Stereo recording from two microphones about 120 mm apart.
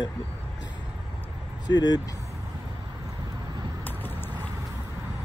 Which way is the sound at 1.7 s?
35° left (ahead or behind).